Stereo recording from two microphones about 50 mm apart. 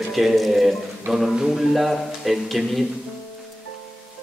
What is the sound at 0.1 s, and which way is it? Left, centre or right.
A man's voice, centre.